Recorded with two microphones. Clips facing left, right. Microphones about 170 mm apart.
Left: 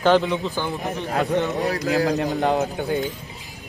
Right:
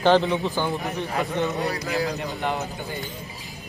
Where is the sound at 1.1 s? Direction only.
65° left (ahead or behind).